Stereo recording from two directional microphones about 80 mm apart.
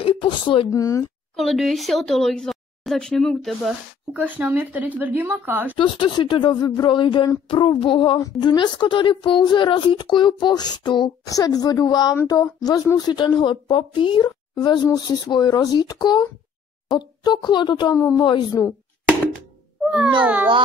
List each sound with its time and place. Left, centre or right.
0.0 s a sound: left
0.7 s a woman's voice: left
1.3 s speech: centre
4.1 s a woman's voice: centre
5.8 s speech: left
8.4 s speech: left
11.2 s a woman's voice: left
19.8 s a sound: centre
20.2 s a child's voice: centre